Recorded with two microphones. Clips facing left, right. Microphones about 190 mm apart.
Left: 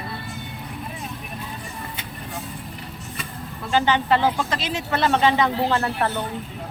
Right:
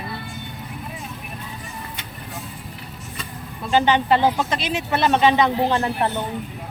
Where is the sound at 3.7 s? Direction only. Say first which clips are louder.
Right 2 dB; 20° right (ahead or behind).